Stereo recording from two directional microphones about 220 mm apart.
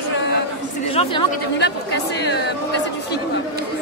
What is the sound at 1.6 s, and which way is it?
Speech, 50° left (ahead or behind).